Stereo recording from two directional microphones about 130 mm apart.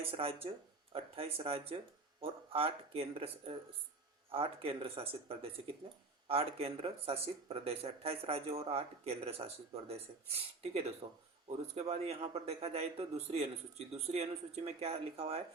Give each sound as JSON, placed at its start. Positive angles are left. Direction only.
{"t": 0.0, "sound": "speech", "side_deg": -45}